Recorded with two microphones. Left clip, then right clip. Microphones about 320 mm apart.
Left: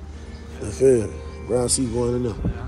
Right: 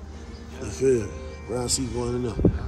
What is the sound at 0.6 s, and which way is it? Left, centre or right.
Music, centre.